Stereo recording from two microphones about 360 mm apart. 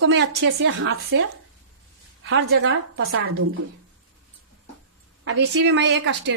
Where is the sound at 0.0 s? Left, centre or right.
Right.